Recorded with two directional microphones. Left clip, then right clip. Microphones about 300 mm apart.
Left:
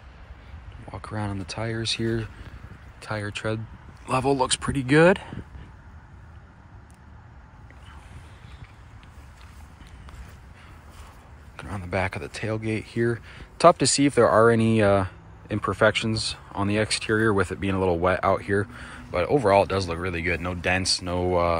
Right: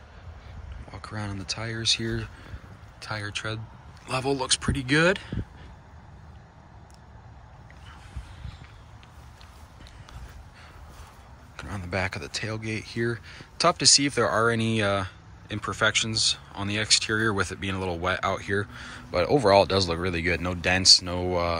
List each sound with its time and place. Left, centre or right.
0.8 s speech: centre
11.5 s speech: centre